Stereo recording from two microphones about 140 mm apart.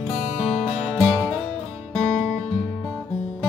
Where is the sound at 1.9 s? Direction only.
5° left (ahead or behind).